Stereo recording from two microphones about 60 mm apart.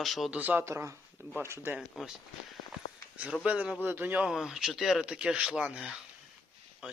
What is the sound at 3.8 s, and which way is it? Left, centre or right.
Speech, right.